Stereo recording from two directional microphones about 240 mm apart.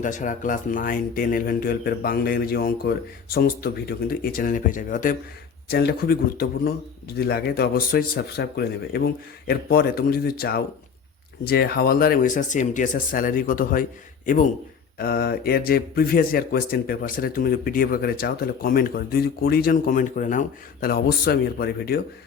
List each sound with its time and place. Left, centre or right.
0.0 s speech: left
14.9 s speech: left